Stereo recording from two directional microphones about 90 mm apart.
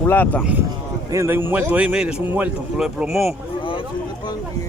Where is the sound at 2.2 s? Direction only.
20° right (ahead or behind).